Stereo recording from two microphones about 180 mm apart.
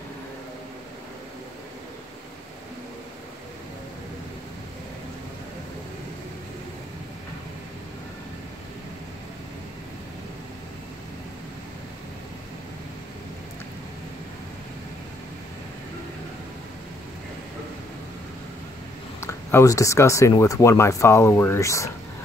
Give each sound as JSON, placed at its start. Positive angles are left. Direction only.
{"t": 19.2, "sound": "speech", "side_deg": 15}